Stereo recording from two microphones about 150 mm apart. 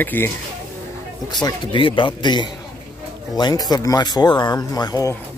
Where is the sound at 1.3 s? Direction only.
30° left (ahead or behind).